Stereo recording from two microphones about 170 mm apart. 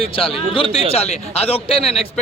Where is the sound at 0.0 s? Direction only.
35° left (ahead or behind).